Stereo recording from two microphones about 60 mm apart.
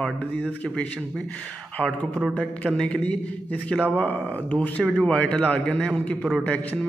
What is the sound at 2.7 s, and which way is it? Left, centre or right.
Speech, centre.